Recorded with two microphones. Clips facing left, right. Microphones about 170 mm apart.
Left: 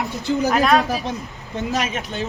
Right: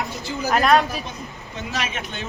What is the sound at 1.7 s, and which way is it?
Speech, 40° left (ahead or behind).